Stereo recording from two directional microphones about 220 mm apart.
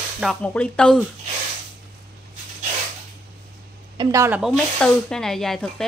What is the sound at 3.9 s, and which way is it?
Speech, 15° right (ahead or behind).